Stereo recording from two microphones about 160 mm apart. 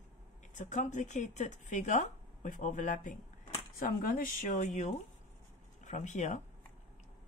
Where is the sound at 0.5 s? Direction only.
50° left (ahead or behind).